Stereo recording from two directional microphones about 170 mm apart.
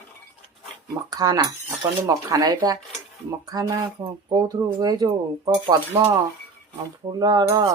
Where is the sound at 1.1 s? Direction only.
20° right (ahead or behind).